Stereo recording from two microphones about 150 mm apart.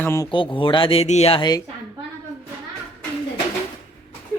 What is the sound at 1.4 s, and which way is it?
Speech, 25° left (ahead or behind).